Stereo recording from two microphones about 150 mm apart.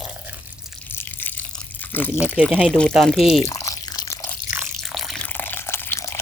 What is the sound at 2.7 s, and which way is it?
Speech, 5° left (ahead or behind).